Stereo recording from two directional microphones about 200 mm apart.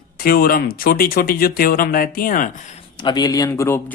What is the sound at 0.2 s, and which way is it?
Speech, 45° left (ahead or behind).